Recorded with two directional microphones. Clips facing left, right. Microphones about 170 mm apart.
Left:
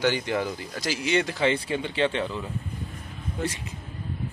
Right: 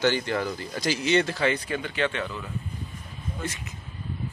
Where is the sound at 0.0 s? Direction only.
15° left (ahead or behind).